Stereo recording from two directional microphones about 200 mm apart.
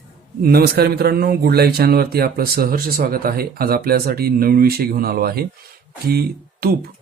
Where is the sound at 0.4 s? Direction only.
50° right (ahead or behind).